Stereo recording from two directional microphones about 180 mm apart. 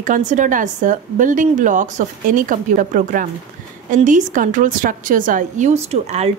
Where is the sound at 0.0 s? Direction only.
45° right (ahead or behind).